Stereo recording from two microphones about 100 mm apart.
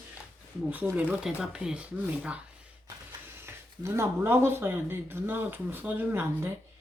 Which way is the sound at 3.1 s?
25° right (ahead or behind).